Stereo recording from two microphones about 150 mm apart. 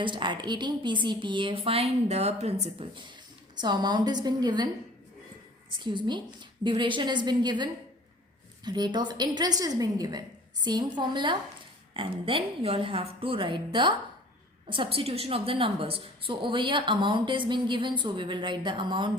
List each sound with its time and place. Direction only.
0.0 s a woman's voice: 30° right (ahead or behind)
5.8 s a woman's voice: 30° right (ahead or behind)
14.7 s a woman's voice: 35° right (ahead or behind)